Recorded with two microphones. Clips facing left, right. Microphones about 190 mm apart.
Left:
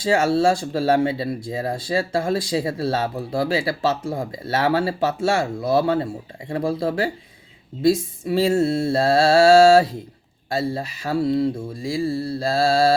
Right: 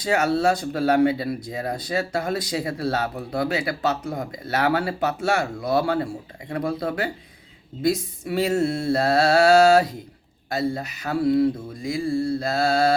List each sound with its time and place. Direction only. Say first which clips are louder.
0.0 s speech: left 3 dB; 25° left (ahead or behind)